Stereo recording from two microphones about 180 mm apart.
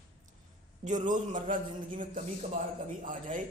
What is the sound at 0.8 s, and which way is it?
A man's voice, 45° right (ahead or behind).